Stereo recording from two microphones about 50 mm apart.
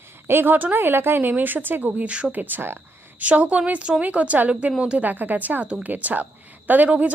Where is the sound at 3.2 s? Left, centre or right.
Right.